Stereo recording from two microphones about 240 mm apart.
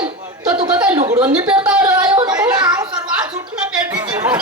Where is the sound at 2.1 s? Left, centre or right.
Centre.